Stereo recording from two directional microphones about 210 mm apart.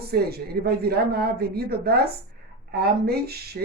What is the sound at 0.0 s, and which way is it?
Speech, 50° right (ahead or behind).